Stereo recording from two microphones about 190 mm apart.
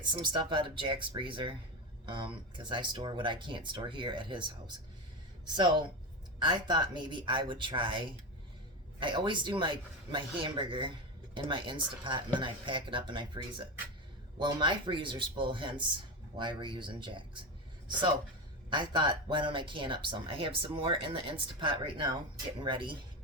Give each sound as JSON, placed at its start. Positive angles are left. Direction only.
{"t": 0.0, "sound": "speech", "side_deg": -25}
{"t": 18.7, "sound": "speech", "side_deg": -25}